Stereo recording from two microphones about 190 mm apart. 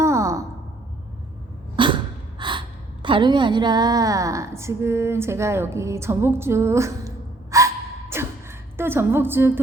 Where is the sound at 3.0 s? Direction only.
25° right (ahead or behind).